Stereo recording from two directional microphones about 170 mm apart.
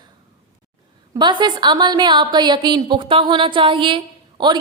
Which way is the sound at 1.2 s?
25° right (ahead or behind).